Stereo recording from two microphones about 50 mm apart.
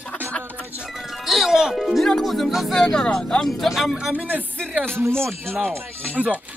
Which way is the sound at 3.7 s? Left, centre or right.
Centre.